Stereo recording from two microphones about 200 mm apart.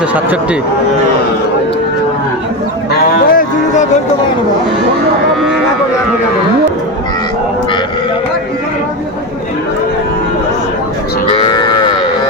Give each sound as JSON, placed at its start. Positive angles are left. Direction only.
{"t": 3.2, "sound": "music", "side_deg": 40}
{"t": 11.3, "sound": "cattle", "side_deg": 20}